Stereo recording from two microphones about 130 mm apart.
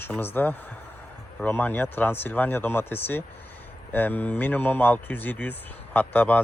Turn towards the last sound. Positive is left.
turn(degrees=10)  # may be behind; listen again after turning